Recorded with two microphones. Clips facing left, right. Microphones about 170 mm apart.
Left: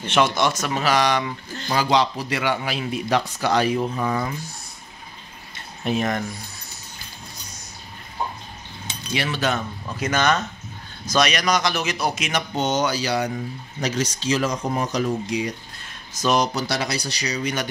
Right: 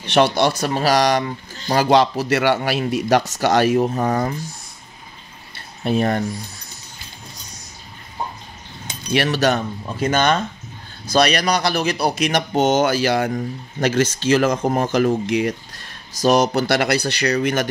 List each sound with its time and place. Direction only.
0.1 s speech: 35° right (ahead or behind)
2.4 s a man's voice: 70° right (ahead or behind)
2.8 s speech: 45° right (ahead or behind)
5.9 s speech: 35° right (ahead or behind)
9.3 s speech: 40° right (ahead or behind)
16.1 s speech: 35° right (ahead or behind)
16.5 s speech: 60° right (ahead or behind)